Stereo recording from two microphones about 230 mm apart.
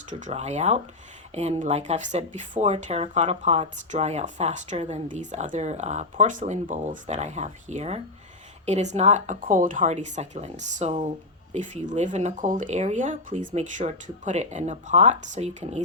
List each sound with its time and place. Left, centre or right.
0.1 s speech: right